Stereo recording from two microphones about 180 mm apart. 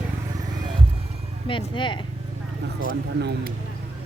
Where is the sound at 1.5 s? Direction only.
30° left (ahead or behind).